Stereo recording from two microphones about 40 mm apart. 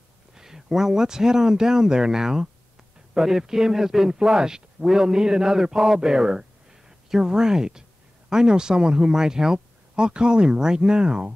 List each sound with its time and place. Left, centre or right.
0.3 s speech: centre